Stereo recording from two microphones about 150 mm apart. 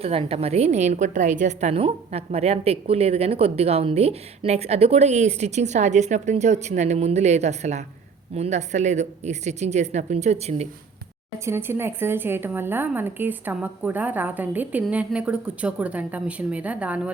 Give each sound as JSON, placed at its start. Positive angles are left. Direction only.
{"t": 0.0, "sound": "a woman's voice", "side_deg": -40}
{"t": 11.4, "sound": "a woman's voice", "side_deg": -15}